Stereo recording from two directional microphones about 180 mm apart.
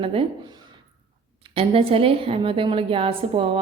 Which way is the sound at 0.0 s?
30° right (ahead or behind).